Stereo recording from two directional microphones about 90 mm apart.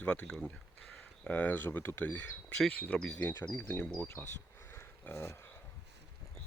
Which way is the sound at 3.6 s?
25° left (ahead or behind).